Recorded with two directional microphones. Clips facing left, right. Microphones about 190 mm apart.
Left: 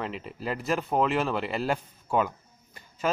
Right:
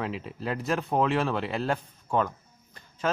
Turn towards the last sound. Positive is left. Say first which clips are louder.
# left 1 dB
turn(degrees=5)  # may be behind; listen again after turning